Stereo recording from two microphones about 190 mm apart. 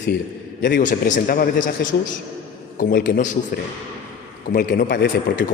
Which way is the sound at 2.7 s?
50° left (ahead or behind).